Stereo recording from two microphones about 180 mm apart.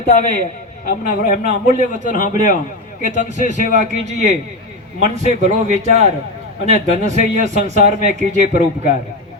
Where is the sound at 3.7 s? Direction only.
40° right (ahead or behind).